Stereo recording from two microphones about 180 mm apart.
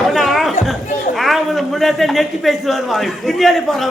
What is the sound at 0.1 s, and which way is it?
Chatter, centre (ahead or behind).